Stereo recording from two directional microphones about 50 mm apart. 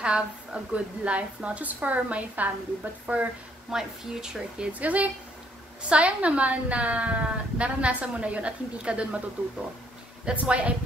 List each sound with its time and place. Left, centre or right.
0.0 s speech: right
3.7 s speech: centre
4.7 s speech: right
10.3 s speech: right